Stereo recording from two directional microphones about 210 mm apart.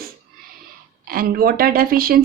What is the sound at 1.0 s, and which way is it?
Speech, 45° right (ahead or behind).